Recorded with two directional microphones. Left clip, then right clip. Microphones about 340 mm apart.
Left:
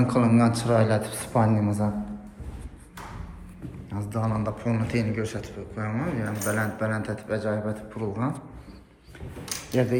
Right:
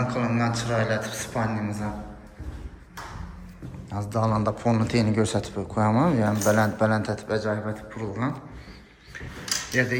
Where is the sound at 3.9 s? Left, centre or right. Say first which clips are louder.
Right 5 dB; centre.